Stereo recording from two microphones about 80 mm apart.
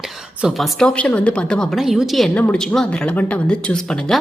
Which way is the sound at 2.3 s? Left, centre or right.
Centre.